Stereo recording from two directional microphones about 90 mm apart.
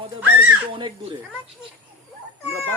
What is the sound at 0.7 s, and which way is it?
Speech, 65° right (ahead or behind).